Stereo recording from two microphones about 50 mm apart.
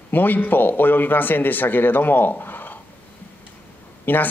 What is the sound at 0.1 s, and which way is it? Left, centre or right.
Speech, left.